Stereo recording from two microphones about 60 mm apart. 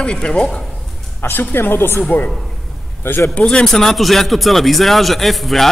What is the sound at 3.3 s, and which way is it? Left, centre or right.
Speech, centre.